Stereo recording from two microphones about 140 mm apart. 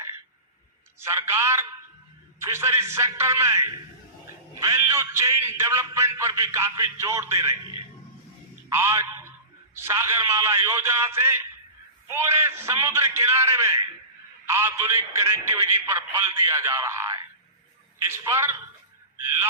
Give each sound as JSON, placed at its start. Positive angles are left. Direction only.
{"t": 0.9, "sound": "a man's voice", "side_deg": -20}
{"t": 8.7, "sound": "a man's voice", "side_deg": -20}